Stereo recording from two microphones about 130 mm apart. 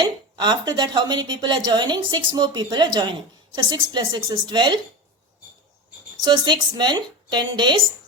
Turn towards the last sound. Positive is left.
turn(degrees=-35)  # may be behind; listen again after turning